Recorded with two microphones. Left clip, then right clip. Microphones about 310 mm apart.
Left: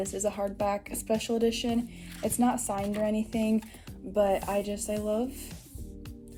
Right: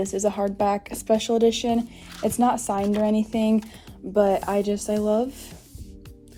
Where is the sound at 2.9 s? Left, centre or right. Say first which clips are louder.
Right 6 dB; right.